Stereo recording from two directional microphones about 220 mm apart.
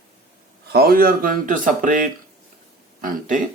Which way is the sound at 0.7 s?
45° right (ahead or behind).